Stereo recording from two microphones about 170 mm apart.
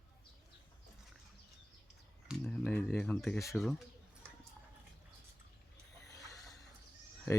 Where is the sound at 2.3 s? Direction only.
5° left (ahead or behind).